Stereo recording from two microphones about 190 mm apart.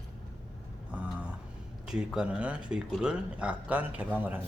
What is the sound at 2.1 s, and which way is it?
Speech, 5° right (ahead or behind).